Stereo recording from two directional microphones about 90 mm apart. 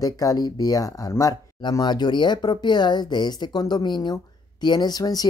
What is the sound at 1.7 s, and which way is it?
Speech, 50° left (ahead or behind).